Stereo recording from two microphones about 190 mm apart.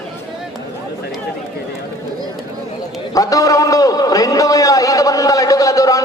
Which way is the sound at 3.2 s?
20° left (ahead or behind).